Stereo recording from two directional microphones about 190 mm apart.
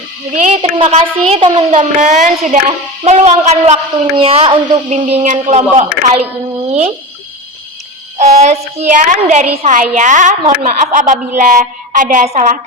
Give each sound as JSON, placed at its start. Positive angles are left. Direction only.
{"t": 0.4, "sound": "a woman's voice", "side_deg": -30}
{"t": 8.2, "sound": "a woman's voice", "side_deg": -35}